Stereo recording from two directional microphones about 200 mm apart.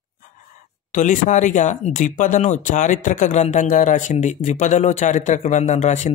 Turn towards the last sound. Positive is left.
turn(degrees=35)  # may be behind; listen again after turning